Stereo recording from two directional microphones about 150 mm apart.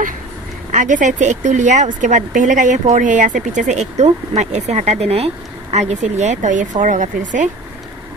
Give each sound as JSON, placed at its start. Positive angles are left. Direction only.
{"t": 0.7, "sound": "speech", "side_deg": -60}